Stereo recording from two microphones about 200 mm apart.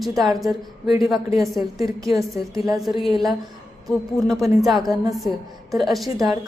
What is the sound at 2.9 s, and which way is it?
Speech, 30° left (ahead or behind).